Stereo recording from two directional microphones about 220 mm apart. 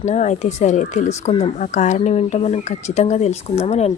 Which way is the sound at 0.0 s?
30° left (ahead or behind).